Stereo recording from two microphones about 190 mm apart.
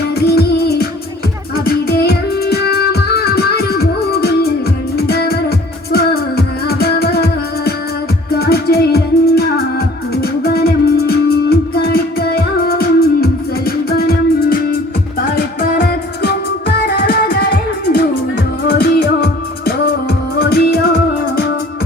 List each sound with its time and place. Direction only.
0.2 s music: 55° left (ahead or behind)